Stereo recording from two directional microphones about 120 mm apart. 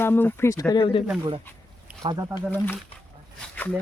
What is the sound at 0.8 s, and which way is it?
Speech, 45° left (ahead or behind).